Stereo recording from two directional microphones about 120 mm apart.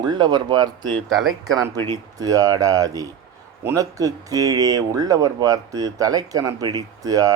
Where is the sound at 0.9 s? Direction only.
Centre (ahead or behind).